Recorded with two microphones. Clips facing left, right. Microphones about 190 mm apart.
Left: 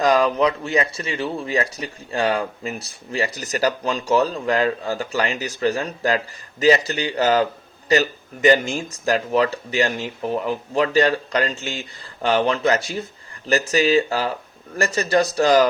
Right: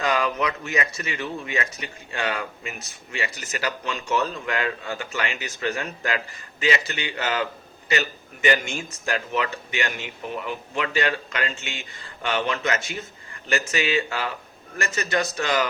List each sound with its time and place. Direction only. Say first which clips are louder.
0.0 s speech: left 7 dB; 35° left (ahead or behind)